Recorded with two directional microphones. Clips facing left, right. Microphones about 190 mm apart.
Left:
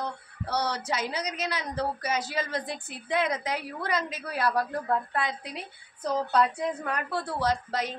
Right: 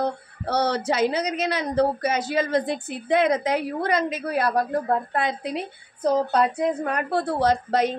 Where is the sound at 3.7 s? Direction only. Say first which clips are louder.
Right 7 dB; 50° right (ahead or behind).